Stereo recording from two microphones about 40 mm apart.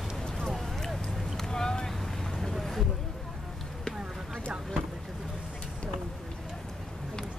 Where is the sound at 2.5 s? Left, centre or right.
Centre.